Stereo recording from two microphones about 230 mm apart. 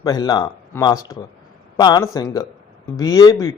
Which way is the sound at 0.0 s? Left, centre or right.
Centre.